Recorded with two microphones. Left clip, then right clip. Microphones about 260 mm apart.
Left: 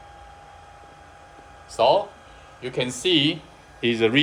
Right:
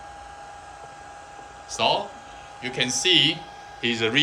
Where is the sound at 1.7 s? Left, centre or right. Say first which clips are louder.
Left 4 dB; centre.